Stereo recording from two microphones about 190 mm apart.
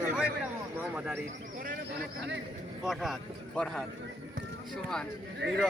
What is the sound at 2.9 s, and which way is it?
Speech, centre (ahead or behind).